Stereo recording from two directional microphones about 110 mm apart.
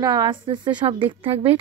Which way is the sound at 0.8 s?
60° right (ahead or behind).